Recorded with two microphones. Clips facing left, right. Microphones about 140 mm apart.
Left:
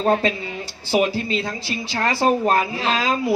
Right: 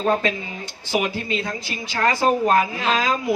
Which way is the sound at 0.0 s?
35° left (ahead or behind).